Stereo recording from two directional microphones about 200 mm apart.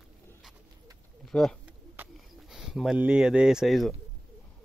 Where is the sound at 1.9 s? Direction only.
5° right (ahead or behind).